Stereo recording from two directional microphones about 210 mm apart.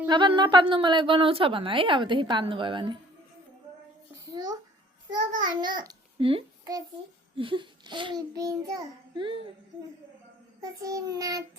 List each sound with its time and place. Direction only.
0.1 s a woman's voice: 20° right (ahead or behind)
4.3 s a child's voice: 20° right (ahead or behind)
5.5 s a child's voice: 20° right (ahead or behind)
10.6 s child singing: 15° right (ahead or behind)